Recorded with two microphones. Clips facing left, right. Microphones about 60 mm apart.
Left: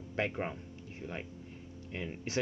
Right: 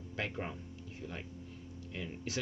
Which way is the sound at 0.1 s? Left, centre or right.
Left.